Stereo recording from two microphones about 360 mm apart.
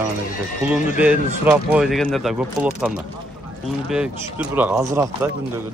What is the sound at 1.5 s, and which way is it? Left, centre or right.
Speech, centre.